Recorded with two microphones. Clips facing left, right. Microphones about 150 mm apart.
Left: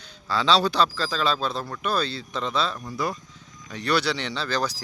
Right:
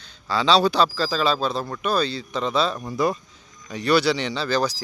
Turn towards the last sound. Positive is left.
turn(degrees=0)  # may be behind; listen again after turning